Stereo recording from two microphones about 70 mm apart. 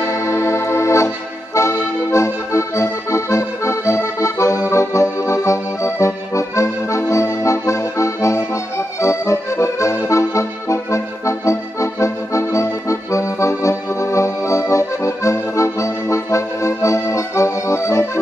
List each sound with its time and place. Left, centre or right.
0.0 s accordion: left